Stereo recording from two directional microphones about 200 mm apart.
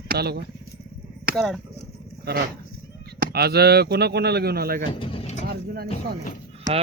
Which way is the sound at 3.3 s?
50° right (ahead or behind).